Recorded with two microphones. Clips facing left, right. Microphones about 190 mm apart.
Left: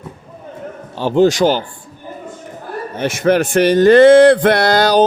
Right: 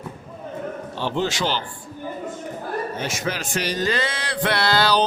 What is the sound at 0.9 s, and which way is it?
Speech, 45° left (ahead or behind).